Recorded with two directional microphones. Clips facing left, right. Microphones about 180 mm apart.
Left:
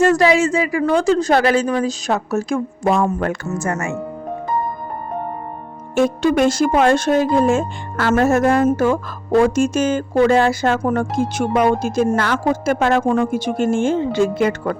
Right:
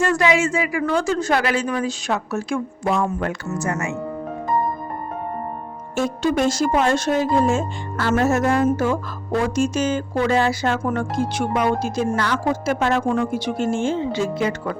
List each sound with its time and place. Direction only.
0.0 s a woman's voice: 40° left (ahead or behind)
6.0 s speech: 60° left (ahead or behind)